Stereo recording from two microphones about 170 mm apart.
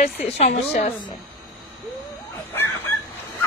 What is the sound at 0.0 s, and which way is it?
Speech, 50° left (ahead or behind).